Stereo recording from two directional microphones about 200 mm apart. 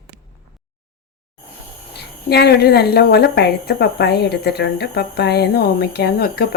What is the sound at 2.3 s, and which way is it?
A woman's voice, 55° left (ahead or behind).